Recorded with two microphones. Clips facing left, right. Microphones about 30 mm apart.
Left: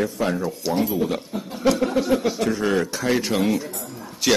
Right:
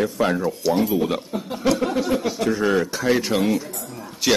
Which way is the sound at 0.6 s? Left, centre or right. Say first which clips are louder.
Right 2 dB; centre.